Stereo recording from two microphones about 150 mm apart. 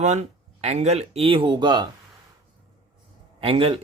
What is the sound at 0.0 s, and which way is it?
Speech, 50° right (ahead or behind).